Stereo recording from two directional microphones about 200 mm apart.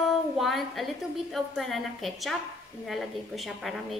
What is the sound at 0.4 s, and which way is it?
A woman's voice, centre (ahead or behind).